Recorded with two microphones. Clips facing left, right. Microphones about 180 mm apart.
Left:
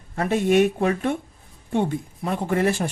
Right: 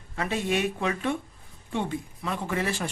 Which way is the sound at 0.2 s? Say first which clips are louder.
Left 8 dB; 50° left (ahead or behind).